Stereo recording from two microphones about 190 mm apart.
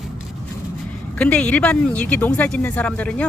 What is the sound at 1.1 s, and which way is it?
Speech, 5° left (ahead or behind).